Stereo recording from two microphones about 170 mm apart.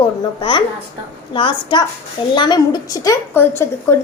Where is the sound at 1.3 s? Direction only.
30° left (ahead or behind).